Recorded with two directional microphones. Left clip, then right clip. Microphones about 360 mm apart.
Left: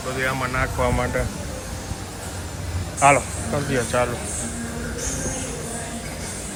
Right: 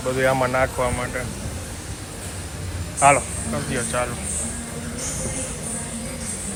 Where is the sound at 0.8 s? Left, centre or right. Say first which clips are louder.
Left 2 dB; centre.